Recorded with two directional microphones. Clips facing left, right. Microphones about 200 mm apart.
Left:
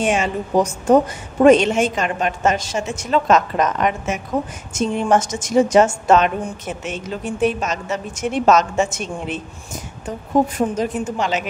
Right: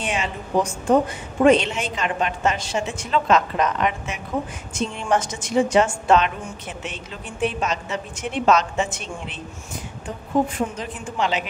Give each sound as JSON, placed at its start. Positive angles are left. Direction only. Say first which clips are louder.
{"t": 0.0, "sound": "a woman's voice", "louder": "left 7 dB", "side_deg": 45}